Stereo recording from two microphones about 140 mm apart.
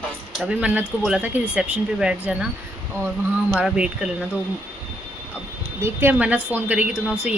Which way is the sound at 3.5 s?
5° right (ahead or behind).